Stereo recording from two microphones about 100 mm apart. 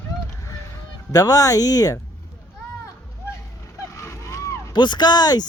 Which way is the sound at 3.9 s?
30° left (ahead or behind).